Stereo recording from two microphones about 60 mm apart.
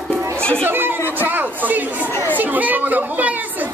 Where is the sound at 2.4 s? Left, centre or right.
Right.